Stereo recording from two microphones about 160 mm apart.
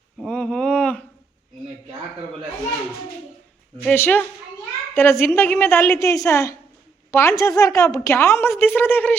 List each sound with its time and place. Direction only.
0.2 s speech: 5° left (ahead or behind)
3.8 s a woman's voice: 10° left (ahead or behind)